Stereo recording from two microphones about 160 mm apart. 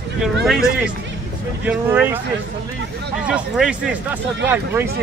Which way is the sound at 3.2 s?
5° right (ahead or behind).